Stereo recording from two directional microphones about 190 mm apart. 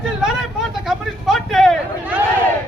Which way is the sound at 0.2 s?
5° right (ahead or behind).